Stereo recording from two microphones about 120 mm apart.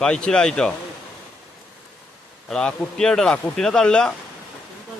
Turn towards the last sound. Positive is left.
turn(degrees=5)  # may be behind; listen again after turning